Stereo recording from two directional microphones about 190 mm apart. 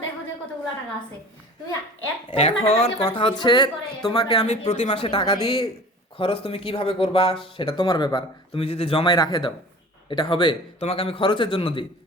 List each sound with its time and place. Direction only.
2.3 s speech: 30° left (ahead or behind)